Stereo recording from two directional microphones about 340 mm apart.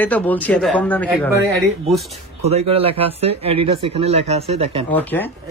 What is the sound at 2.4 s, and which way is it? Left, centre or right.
Speech, centre.